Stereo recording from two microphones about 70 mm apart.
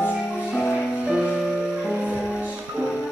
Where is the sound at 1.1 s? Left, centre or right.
Centre.